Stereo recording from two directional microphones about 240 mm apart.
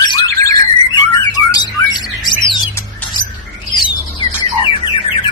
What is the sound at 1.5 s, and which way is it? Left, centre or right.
Bird, centre.